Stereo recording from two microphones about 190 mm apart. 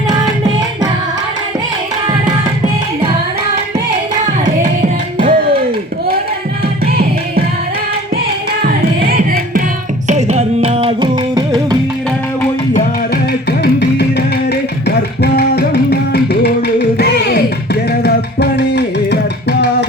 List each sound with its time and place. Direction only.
5.2 s music: 50° right (ahead or behind)
9.0 s music: 50° right (ahead or behind)
10.1 s music: 35° right (ahead or behind)
13.6 s music: 60° left (ahead or behind)